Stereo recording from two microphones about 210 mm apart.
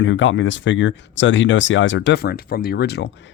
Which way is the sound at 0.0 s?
65° left (ahead or behind).